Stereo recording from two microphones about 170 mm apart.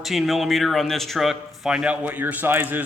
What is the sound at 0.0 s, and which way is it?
A man's voice, centre (ahead or behind).